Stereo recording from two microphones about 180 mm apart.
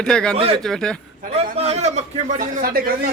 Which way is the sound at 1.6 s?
35° right (ahead or behind).